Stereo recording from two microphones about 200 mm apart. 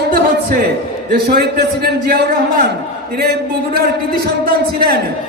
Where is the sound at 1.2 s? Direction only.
50° right (ahead or behind).